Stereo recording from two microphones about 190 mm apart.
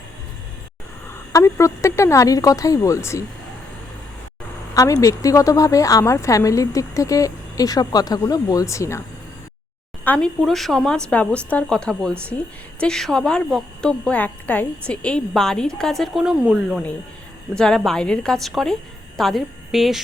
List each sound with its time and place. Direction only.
1.1 s speech: 15° left (ahead or behind)
4.7 s speech: 15° left (ahead or behind); by 20.0 s centre (ahead or behind)